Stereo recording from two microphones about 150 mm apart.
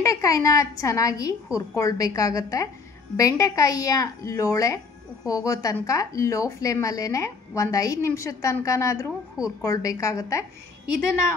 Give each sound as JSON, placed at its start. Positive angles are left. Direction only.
{"t": 0.0, "sound": "a woman's voice", "side_deg": 20}